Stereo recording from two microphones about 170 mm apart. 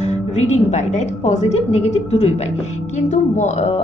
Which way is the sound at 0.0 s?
40° left (ahead or behind).